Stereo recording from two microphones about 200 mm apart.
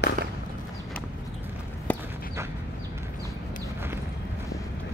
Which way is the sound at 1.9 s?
5° left (ahead or behind).